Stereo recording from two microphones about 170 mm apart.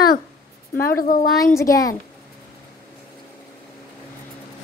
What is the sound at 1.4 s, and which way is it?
Speech, 20° left (ahead or behind).